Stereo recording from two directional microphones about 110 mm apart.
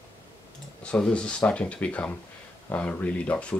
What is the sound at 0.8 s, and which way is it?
Speech, 10° left (ahead or behind).